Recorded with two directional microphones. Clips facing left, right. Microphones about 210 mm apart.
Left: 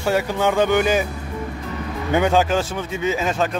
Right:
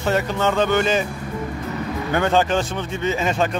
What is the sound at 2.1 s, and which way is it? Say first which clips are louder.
Speech: left 1 dB; 10° left (ahead or behind).